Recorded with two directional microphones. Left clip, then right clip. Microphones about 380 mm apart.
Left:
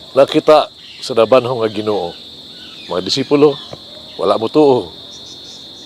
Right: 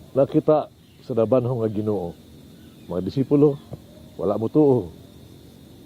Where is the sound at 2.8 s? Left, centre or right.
Centre.